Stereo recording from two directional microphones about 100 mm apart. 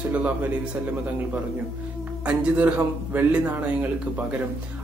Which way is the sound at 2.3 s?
15° right (ahead or behind).